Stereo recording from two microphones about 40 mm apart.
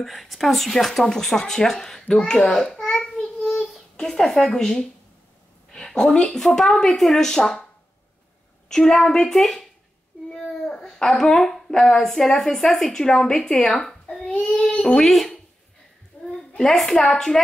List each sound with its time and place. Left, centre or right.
0.0 s speech: centre
2.0 s babbling: left
5.7 s speech: centre
8.6 s a woman's voice: centre
10.3 s child singing: centre
10.7 s babbling: centre
11.5 s speech: centre
14.4 s child singing: left
15.0 s speech: centre
16.1 s a sound: left
16.6 s speech: centre